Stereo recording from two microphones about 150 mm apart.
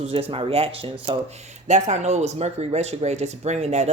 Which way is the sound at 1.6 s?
50° right (ahead or behind).